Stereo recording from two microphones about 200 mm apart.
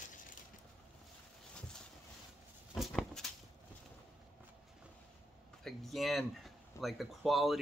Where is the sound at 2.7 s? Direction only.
Centre (ahead or behind).